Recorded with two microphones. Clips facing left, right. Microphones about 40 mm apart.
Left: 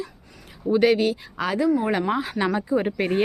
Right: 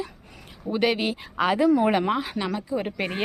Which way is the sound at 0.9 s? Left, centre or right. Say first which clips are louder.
Left 3 dB; right.